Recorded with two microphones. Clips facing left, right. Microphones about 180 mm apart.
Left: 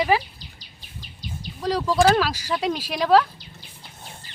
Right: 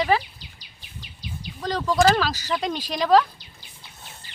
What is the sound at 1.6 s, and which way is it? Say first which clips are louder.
Speech: left 1 dB; 10° left (ahead or behind).